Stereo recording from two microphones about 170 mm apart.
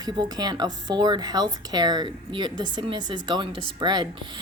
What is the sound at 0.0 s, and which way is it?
Speech, 25° right (ahead or behind).